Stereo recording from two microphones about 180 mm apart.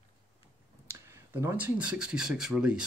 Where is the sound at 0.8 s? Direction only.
15° right (ahead or behind).